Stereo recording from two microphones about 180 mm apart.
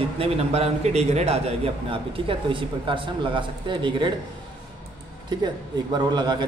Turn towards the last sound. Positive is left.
turn(degrees=-25)  # may be behind; listen again after turning